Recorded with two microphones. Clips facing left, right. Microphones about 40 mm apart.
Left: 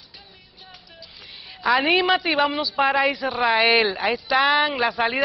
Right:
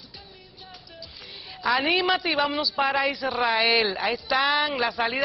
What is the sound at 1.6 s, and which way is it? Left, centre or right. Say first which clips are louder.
Speech: left 4 dB; centre.